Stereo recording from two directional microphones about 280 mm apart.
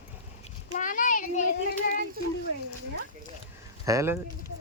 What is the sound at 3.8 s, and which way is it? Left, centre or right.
Speech, centre.